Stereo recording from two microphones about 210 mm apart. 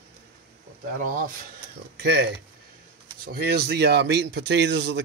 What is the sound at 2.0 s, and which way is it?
Speech, 50° right (ahead or behind).